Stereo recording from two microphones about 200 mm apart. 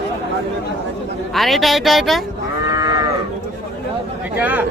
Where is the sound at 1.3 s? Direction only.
Centre (ahead or behind).